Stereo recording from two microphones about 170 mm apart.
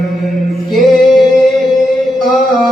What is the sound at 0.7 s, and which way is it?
Music, centre (ahead or behind).